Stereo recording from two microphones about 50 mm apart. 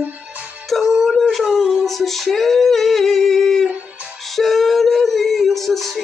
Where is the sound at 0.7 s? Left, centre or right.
Centre.